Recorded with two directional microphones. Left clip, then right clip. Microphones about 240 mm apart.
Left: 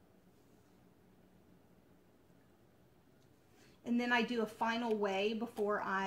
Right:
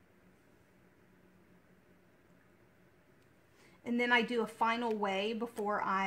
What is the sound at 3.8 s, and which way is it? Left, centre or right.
Speech, right.